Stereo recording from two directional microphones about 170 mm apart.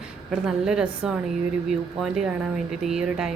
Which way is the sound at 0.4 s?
5° right (ahead or behind).